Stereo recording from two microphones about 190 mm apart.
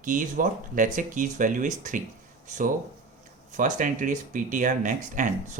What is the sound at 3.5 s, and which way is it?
Speech, 40° right (ahead or behind).